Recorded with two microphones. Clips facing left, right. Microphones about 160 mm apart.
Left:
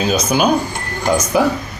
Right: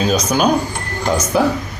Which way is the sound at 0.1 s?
10° left (ahead or behind).